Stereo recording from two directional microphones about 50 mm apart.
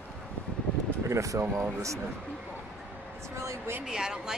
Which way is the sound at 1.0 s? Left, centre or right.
Right.